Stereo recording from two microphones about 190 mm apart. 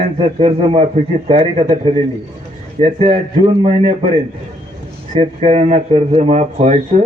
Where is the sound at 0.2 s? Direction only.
30° right (ahead or behind).